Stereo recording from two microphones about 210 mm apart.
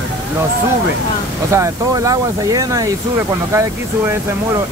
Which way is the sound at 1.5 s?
15° right (ahead or behind).